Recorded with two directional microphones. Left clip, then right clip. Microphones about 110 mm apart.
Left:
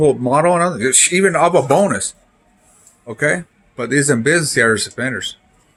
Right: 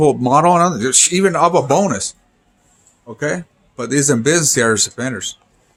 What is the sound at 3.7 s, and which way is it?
Speech, 25° right (ahead or behind).